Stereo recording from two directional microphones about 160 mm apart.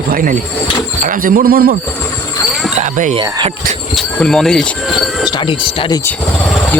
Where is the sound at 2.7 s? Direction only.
50° right (ahead or behind).